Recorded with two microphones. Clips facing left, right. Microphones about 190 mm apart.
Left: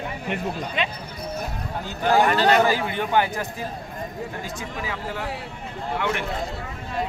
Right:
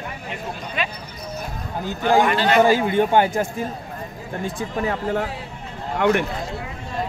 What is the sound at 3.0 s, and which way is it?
Speech, 50° right (ahead or behind).